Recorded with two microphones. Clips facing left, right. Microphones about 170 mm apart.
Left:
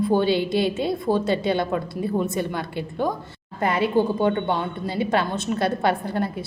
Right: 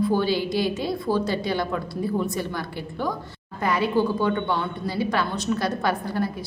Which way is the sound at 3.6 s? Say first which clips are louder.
Left 2 dB; 25° left (ahead or behind).